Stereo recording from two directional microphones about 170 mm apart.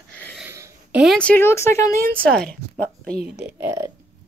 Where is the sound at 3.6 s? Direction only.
15° right (ahead or behind).